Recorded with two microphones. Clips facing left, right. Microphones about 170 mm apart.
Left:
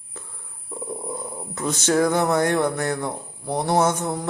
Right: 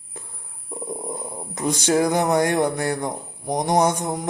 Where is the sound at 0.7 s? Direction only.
15° right (ahead or behind).